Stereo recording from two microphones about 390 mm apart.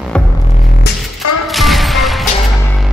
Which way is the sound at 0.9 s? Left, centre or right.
Left.